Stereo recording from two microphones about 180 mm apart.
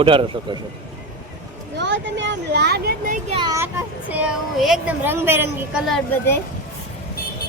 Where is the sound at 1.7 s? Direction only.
80° right; by 3.4 s 50° right (ahead or behind).